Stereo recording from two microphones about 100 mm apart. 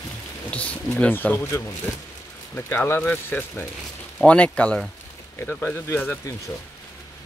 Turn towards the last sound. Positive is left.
turn(degrees=20)  # may be behind; listen again after turning